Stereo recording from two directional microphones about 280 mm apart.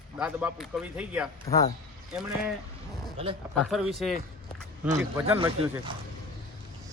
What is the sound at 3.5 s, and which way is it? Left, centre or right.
Speech, centre.